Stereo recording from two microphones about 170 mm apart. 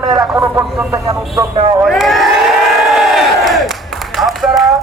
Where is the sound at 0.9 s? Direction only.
20° right (ahead or behind).